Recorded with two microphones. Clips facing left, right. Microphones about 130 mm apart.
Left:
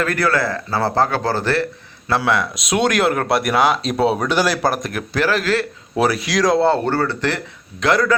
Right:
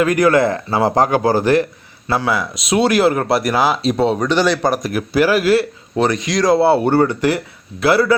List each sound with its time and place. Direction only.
0.0 s speech: 15° right (ahead or behind)
2.0 s speech: 5° right (ahead or behind)
6.0 s speech: 5° left (ahead or behind)